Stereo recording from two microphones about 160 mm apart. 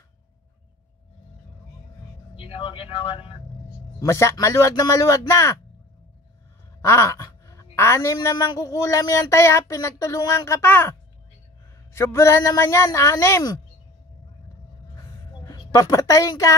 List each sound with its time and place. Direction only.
2.3 s speech: 35° left (ahead or behind)
4.0 s speech: 20° left (ahead or behind)
6.8 s speech: 15° left (ahead or behind)
15.4 s a woman's voice: 20° left (ahead or behind)